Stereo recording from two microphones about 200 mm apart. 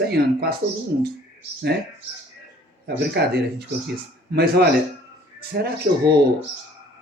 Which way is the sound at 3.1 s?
55° right (ahead or behind).